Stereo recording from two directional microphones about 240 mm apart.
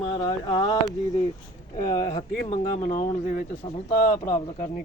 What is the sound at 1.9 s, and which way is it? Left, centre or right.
Speech, centre.